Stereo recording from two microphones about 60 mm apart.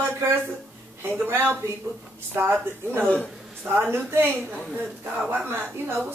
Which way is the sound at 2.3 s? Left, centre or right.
Right.